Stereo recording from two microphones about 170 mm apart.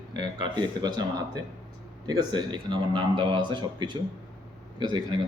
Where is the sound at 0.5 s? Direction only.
25° right (ahead or behind).